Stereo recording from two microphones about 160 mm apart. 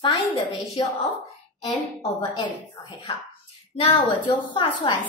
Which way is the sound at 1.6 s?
35° left (ahead or behind).